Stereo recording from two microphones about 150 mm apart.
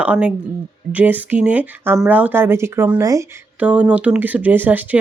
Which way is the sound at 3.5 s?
10° right (ahead or behind).